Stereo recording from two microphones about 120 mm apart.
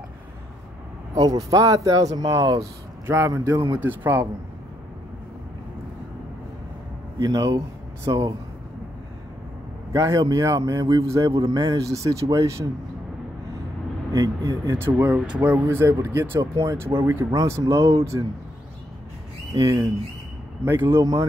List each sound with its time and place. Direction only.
1.1 s speech: 30° right (ahead or behind)
3.1 s a man's voice: 20° right (ahead or behind)
3.5 s speech: 35° right (ahead or behind)
3.8 s speech: 15° right (ahead or behind)
7.2 s speech: 35° right (ahead or behind)
9.9 s a man's voice: 30° right (ahead or behind)
14.1 s a man's voice: 25° right (ahead or behind)
19.5 s speech: 30° right (ahead or behind)
20.6 s a man's voice: 20° right (ahead or behind)